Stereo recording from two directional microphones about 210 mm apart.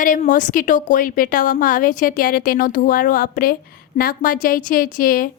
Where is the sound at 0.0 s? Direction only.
40° left (ahead or behind).